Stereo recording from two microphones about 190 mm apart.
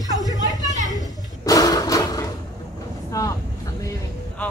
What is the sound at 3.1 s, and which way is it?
Vehicle, 15° left (ahead or behind).